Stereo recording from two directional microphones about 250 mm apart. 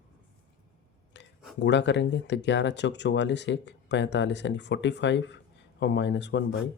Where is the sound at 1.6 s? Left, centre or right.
Left.